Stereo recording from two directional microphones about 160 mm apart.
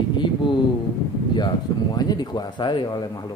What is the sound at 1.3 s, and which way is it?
Speech, 25° left (ahead or behind).